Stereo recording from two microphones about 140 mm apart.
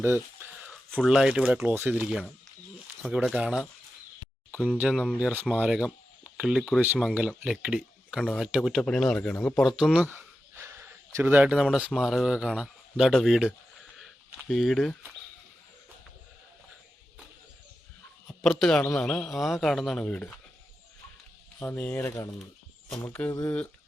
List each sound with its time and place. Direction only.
0.0 s a sound: 15° right (ahead or behind)
0.7 s speech: centre (ahead or behind)
4.8 s speech: 5° right (ahead or behind)
9.7 s speech: 5° right (ahead or behind)
14.0 s a sound: centre (ahead or behind)
18.6 s speech: 5° left (ahead or behind)
21.6 s speech: 10° left (ahead or behind)